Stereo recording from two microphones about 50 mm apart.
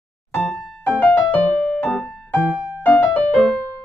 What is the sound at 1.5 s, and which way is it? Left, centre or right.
Music, centre.